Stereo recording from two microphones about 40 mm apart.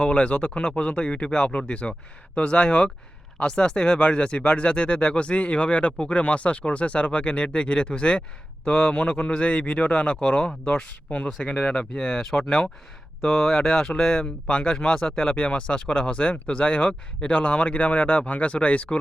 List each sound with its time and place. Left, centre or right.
0.0 s a man's voice: left
10.8 s a man's voice: left; by 12.2 s centre
13.2 s speech: centre
14.4 s speech: left
14.7 s speech: centre